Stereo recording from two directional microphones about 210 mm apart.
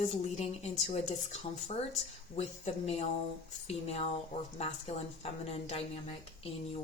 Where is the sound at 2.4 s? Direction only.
30° left (ahead or behind).